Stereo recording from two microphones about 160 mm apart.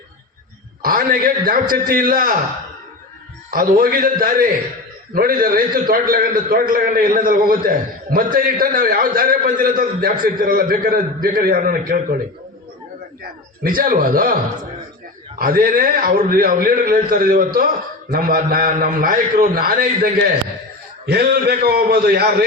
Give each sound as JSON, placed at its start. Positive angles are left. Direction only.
{"t": 0.8, "sound": "a man's voice", "side_deg": -65}
{"t": 3.5, "sound": "a man's voice", "side_deg": -65}
{"t": 13.6, "sound": "a man's voice", "side_deg": -60}
{"t": 15.4, "sound": "a man's voice", "side_deg": -65}
{"t": 21.1, "sound": "a man's voice", "side_deg": -75}